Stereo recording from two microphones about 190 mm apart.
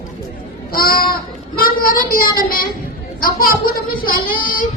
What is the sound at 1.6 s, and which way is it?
Child singing, 50° left (ahead or behind).